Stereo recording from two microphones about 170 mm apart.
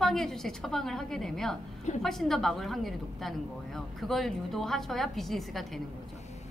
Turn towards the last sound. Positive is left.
turn(degrees=0)  # may be behind; listen again after turning